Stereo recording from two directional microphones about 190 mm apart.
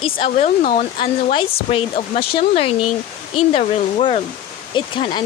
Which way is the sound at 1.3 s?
30° left (ahead or behind).